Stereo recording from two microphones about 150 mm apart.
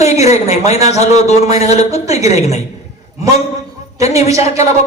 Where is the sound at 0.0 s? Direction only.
50° left (ahead or behind).